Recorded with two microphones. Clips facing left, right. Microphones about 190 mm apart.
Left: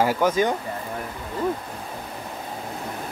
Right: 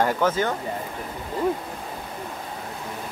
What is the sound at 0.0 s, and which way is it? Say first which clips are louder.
Speech: left 2 dB; 10° left (ahead or behind).